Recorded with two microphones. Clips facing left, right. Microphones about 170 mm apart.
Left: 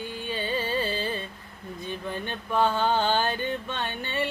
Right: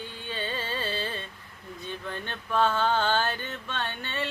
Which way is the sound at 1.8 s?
15° left (ahead or behind).